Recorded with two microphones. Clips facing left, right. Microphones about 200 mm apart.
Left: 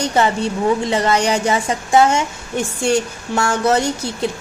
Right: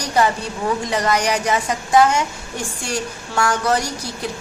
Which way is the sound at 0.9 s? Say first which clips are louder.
Left 3 dB; 25° left (ahead or behind).